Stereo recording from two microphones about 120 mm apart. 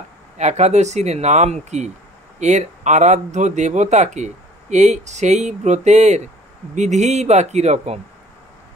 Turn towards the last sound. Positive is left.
turn(degrees=-70)  # may be behind; listen again after turning